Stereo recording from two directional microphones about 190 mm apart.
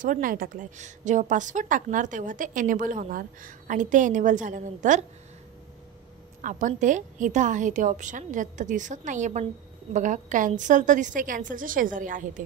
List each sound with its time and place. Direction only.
0.0 s a woman's voice: 45° right (ahead or behind)
6.4 s a woman's voice: 40° right (ahead or behind)